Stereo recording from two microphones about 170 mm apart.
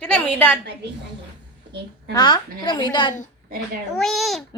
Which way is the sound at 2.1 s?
25° left (ahead or behind).